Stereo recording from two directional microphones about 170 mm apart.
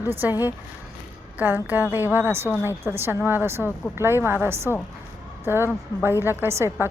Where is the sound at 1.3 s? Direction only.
10° right (ahead or behind).